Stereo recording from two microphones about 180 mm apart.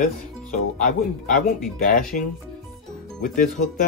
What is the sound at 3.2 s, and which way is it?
Speech, 45° left (ahead or behind).